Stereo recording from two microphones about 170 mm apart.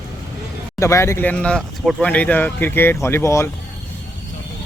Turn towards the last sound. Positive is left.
turn(degrees=15)  # may be behind; listen again after turning